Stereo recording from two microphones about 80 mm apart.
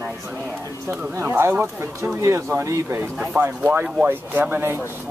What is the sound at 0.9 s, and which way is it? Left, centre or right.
Speech, right.